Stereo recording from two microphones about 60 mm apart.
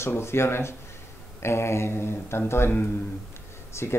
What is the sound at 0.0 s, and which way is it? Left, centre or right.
Speech, left.